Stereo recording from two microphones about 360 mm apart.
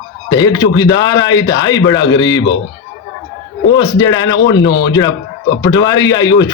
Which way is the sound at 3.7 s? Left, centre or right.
Centre.